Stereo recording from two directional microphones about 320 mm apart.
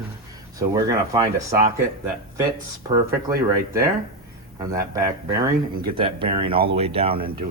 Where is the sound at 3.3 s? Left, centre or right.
Centre.